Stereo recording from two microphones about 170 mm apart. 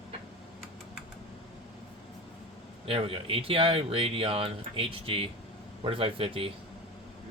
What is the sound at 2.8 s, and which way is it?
Speech, 35° right (ahead or behind).